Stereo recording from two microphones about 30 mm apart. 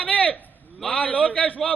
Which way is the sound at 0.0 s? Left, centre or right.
Left.